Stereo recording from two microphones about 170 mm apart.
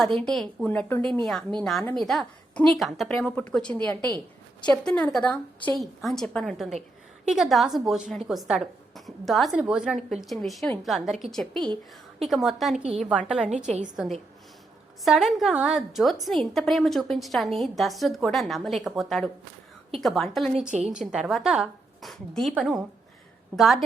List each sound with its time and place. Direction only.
0.0 s a woman's voice: 5° left (ahead or behind)
11.5 s a woman's voice: 25° right (ahead or behind)
12.2 s a woman's voice: centre (ahead or behind)